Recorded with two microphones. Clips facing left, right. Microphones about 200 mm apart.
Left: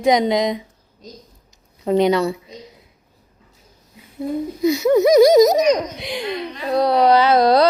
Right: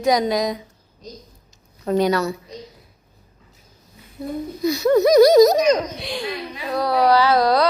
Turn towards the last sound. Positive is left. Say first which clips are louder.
# left 3 dB
turn(degrees=25)  # may be behind; listen again after turning